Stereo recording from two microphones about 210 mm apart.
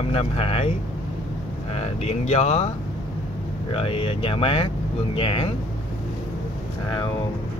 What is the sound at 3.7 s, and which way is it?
Speech, 25° left (ahead or behind).